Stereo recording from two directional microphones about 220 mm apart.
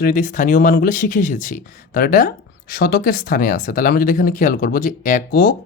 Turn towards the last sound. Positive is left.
turn(degrees=40)  # may be behind; listen again after turning